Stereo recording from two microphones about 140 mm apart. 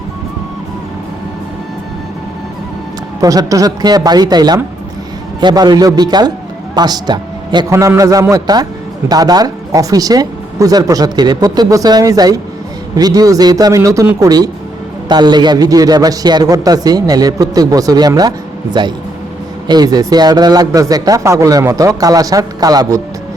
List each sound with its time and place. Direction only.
3.2 s a man's voice: 25° right (ahead or behind)